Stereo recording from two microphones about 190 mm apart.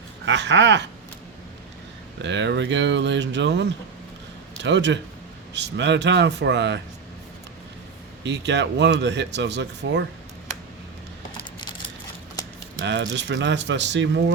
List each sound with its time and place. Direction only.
0.3 s speech: 70° right (ahead or behind)
2.2 s speech: 70° right (ahead or behind)
8.2 s speech: 65° right (ahead or behind)
12.8 s speech: 70° right (ahead or behind)